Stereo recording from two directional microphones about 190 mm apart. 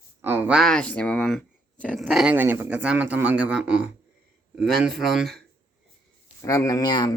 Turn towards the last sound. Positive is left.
turn(degrees=20)  # may be behind; listen again after turning